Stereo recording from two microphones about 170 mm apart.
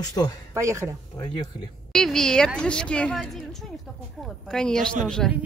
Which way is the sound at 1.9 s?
5° left (ahead or behind).